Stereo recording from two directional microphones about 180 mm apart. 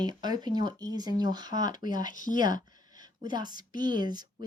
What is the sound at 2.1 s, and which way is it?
Speech, 45° left (ahead or behind).